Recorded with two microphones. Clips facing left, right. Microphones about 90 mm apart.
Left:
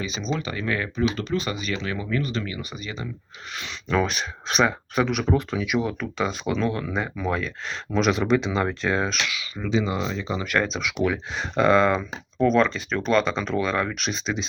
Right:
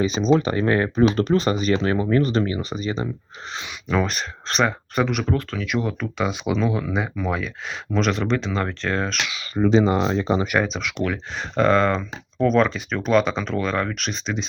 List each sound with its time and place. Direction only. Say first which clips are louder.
0.0 s speech: right 10 dB; 40° right (ahead or behind)
3.8 s speech: right 1 dB; centre (ahead or behind)
5.3 s speech: left 1 dB; 10° left (ahead or behind)
9.4 s speech: right 10 dB; 45° right (ahead or behind)
10.6 s speech: even; centre (ahead or behind)